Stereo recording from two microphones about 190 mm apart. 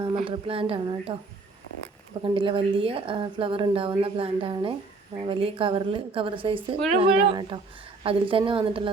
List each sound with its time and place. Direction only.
0.3 s a woman's voice: 30° right (ahead or behind)
2.2 s a woman's voice: 25° right (ahead or behind)